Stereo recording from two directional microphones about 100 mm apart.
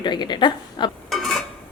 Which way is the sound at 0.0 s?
50° left (ahead or behind).